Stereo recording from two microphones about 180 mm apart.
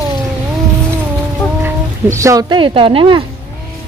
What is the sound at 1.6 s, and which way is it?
Speech, 15° right (ahead or behind).